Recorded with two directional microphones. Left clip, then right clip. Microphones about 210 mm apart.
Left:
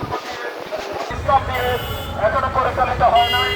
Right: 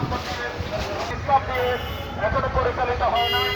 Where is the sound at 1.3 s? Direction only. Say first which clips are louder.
Left 3 dB; 55° left (ahead or behind).